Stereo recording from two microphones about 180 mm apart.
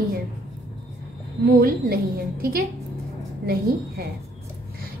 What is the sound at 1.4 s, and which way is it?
Speech, 55° right (ahead or behind).